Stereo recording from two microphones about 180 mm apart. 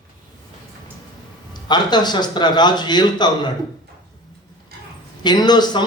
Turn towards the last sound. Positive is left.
turn(degrees=25)  # may be behind; listen again after turning